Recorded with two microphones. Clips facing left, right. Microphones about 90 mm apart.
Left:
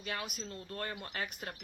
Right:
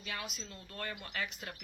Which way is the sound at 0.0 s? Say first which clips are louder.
Left 3 dB; 45° left (ahead or behind).